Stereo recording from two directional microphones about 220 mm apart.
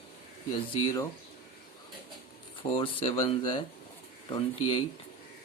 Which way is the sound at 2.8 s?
25° left (ahead or behind).